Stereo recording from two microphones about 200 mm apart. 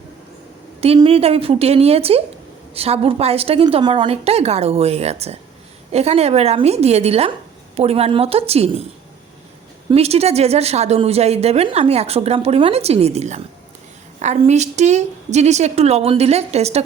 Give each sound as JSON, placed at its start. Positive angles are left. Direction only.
{"t": 0.8, "sound": "a woman's voice", "side_deg": -30}
{"t": 9.9, "sound": "a woman's voice", "side_deg": -30}